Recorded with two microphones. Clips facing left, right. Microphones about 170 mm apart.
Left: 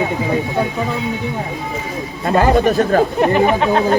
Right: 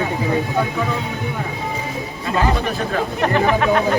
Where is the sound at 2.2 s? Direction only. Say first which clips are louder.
Left 7 dB; 45° left (ahead or behind).